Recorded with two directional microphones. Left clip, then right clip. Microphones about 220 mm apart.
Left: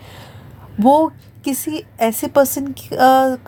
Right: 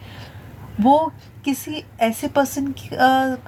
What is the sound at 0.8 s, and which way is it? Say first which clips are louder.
A woman's voice: left 3 dB; 50° left (ahead or behind).